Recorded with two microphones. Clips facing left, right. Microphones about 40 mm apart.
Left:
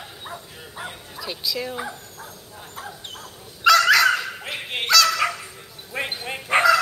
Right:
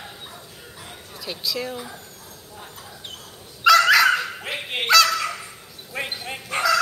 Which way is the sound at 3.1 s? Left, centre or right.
Centre.